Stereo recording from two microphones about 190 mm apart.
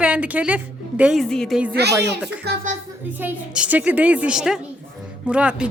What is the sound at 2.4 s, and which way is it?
Speech, 40° right (ahead or behind).